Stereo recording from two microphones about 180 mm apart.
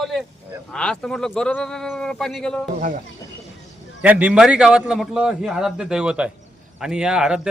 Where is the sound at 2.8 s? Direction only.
50° right (ahead or behind).